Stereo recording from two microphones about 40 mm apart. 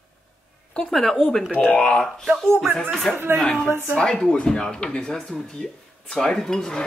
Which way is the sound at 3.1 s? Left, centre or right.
Left.